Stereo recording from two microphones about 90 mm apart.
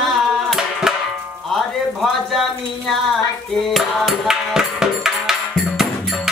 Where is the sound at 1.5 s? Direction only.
Centre (ahead or behind).